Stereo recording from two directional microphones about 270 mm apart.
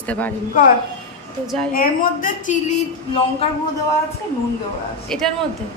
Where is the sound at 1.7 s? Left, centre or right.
Left.